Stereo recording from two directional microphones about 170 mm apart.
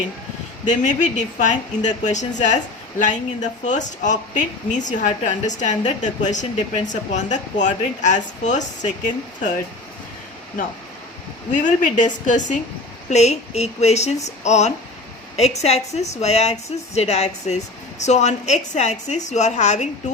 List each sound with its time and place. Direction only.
0.7 s speech: 45° left (ahead or behind)
11.5 s a woman's voice: 45° left (ahead or behind)